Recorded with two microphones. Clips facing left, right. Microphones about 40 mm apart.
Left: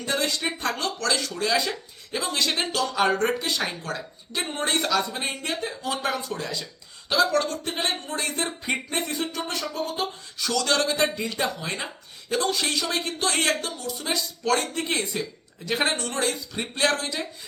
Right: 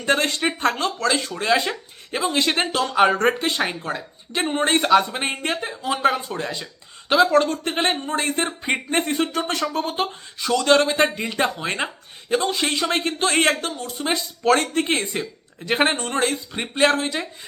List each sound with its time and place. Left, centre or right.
0.0 s speech: right
5.6 s speech: right
10.3 s speech: right
12.3 s speech: right